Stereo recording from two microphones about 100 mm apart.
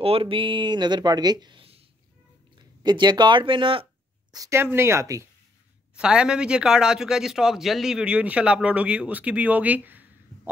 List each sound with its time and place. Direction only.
0.0 s speech: 70° right (ahead or behind); by 1.6 s 45° right (ahead or behind)
1.6 s a sound: 75° right (ahead or behind)
2.8 s speech: 45° right (ahead or behind)
4.5 s speech: 25° right (ahead or behind)
5.9 s speech: 10° right (ahead or behind)